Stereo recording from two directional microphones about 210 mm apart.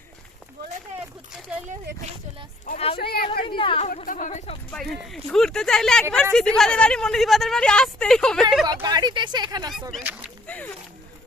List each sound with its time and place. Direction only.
2.6 s speech: 30° left (ahead or behind)
3.0 s speech: 45° left (ahead or behind)
3.4 s speech: 25° left (ahead or behind)
3.8 s speech: 40° left (ahead or behind)
4.7 s speech: centre (ahead or behind)
8.6 s speech: 20° right (ahead or behind)
9.9 s speech: 10° right (ahead or behind)
10.4 s a sound: 5° left (ahead or behind)